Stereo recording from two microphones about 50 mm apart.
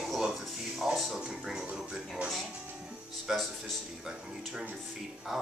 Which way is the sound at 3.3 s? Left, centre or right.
Centre.